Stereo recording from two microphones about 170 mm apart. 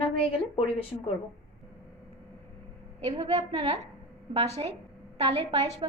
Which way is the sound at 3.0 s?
35° right (ahead or behind).